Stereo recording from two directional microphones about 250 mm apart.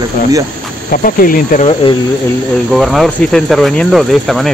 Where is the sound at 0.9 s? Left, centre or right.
Left.